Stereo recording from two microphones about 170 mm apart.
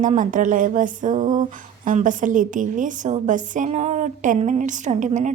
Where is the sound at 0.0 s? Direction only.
50° right (ahead or behind).